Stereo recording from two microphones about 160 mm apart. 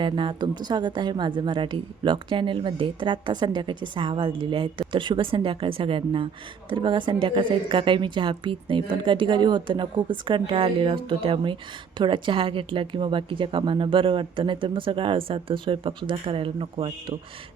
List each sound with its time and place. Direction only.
0.0 s a woman's voice: 30° right (ahead or behind)